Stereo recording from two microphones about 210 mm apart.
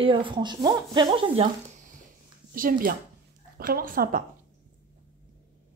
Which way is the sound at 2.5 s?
40° right (ahead or behind).